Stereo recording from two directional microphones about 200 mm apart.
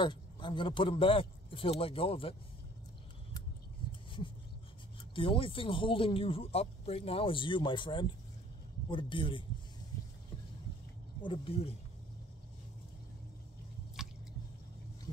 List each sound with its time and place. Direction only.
0.0 s a man's voice: 25° left (ahead or behind)
5.1 s speech: 25° left (ahead or behind)
11.2 s speech: 30° left (ahead or behind)